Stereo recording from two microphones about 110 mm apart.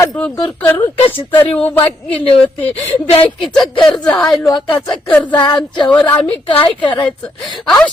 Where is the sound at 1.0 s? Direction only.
60° left (ahead or behind).